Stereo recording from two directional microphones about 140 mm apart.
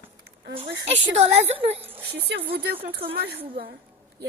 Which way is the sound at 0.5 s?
45° right (ahead or behind).